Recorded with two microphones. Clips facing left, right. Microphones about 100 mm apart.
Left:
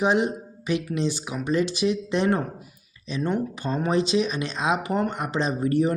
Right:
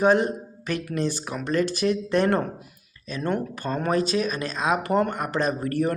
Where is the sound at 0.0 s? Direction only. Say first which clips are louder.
Right 2 dB; 15° left (ahead or behind).